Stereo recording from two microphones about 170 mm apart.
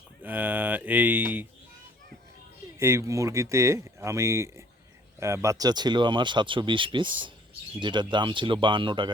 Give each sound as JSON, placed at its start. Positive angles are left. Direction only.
{"t": 0.2, "sound": "speech", "side_deg": -10}
{"t": 2.7, "sound": "speech", "side_deg": -15}